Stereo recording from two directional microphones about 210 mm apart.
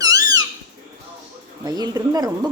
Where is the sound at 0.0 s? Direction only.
15° right (ahead or behind).